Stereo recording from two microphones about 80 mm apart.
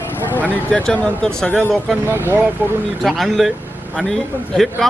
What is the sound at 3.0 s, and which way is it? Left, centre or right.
Speech, centre.